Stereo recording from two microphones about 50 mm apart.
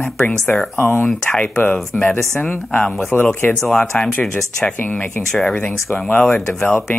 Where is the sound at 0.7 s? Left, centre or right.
Left.